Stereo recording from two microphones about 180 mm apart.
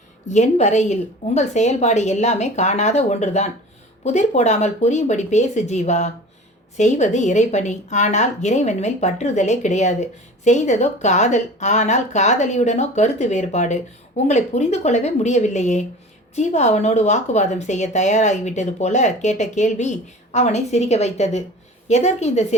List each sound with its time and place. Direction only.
0.3 s a woman's voice: 40° left (ahead or behind)